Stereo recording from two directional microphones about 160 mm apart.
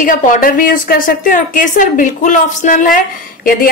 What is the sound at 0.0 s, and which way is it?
A woman's voice, 55° left (ahead or behind).